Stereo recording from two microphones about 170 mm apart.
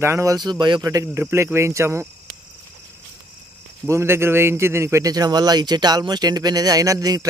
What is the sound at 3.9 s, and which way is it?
A man's voice, 15° right (ahead or behind).